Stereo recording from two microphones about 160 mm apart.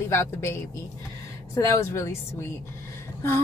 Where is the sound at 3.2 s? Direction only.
15° left (ahead or behind).